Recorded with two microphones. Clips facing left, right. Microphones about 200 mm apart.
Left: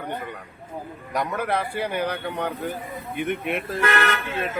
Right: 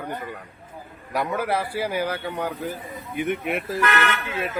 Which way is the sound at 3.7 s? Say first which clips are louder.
Left 1 dB; 30° left (ahead or behind).